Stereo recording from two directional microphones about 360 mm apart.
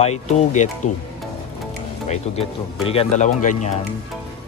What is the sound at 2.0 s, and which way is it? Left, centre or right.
Speech, centre.